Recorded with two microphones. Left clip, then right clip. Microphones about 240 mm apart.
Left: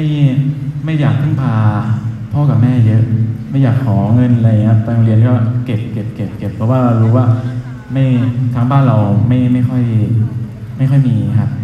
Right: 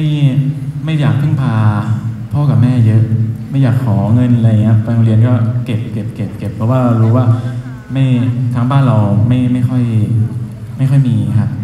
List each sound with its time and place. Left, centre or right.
0.0 s a man's voice: right